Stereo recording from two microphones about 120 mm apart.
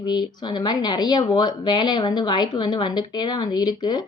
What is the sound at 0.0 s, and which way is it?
Speech, 35° left (ahead or behind).